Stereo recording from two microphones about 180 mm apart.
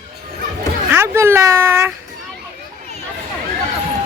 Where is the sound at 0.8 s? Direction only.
15° right (ahead or behind).